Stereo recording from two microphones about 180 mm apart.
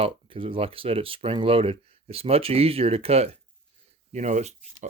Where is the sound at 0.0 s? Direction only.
30° right (ahead or behind).